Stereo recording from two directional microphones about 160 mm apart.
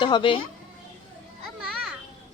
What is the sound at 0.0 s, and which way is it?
Speech, 30° left (ahead or behind).